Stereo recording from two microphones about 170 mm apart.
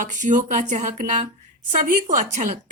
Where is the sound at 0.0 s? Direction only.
45° right (ahead or behind).